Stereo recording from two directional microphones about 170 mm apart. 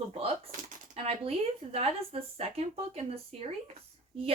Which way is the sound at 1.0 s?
35° right (ahead or behind).